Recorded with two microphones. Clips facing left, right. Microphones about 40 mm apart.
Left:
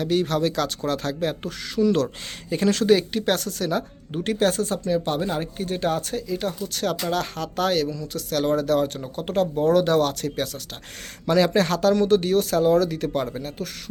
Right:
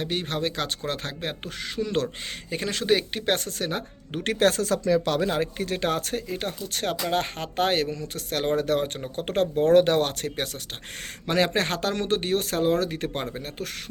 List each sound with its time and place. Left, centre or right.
0.0 s speech: right
2.5 s speech: centre; by 3.8 s right
4.1 s speech: right